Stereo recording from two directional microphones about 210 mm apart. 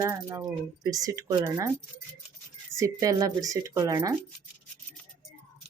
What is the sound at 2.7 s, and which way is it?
Speech, 15° right (ahead or behind).